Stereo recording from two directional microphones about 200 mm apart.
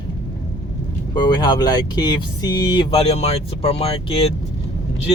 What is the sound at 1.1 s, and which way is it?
Speech, 20° left (ahead or behind).